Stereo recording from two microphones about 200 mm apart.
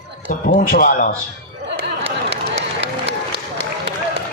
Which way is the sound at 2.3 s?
60° right (ahead or behind).